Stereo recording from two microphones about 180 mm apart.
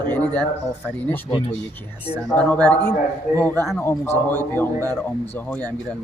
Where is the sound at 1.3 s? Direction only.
30° left (ahead or behind).